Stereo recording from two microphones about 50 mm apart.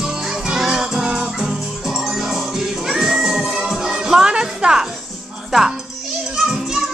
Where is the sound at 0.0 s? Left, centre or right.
Centre.